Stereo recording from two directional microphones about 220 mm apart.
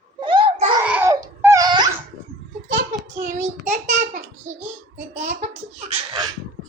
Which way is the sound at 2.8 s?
35° right (ahead or behind).